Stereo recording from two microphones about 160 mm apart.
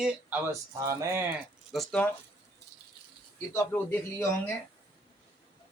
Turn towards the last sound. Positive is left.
turn(degrees=15)  # may be behind; listen again after turning